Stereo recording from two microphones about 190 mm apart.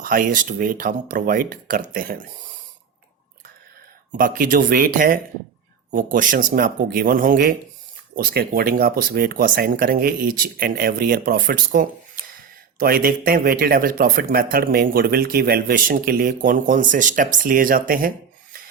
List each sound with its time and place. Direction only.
0.0 s speech: 50° right (ahead or behind)
4.1 s speech: 45° right (ahead or behind)